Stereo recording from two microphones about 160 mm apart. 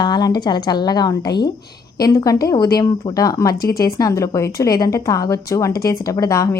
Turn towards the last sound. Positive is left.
turn(degrees=20)  # may be behind; listen again after turning